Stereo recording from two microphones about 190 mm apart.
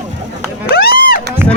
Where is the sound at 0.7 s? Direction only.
50° left (ahead or behind).